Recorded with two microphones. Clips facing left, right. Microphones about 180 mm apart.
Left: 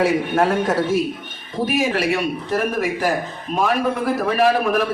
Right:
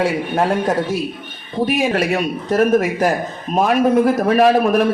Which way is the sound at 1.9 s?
45° right (ahead or behind).